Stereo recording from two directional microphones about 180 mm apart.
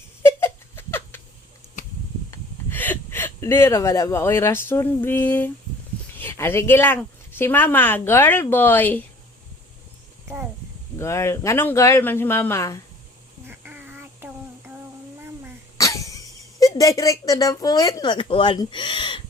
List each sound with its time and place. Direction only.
0.2 s a sound: 15° left (ahead or behind)
2.3 s speech: 10° left (ahead or behind)
10.9 s speech: 15° left (ahead or behind)
13.5 s child singing: 10° right (ahead or behind)
15.8 s speech: 20° left (ahead or behind)